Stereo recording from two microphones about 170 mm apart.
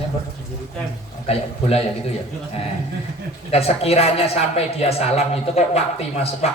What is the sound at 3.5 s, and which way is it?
A man's voice, 35° left (ahead or behind).